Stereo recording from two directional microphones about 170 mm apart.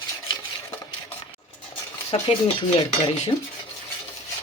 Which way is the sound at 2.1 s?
35° left (ahead or behind).